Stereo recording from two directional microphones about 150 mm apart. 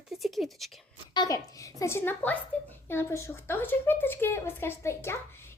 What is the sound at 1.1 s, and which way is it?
A woman's voice, 30° left (ahead or behind).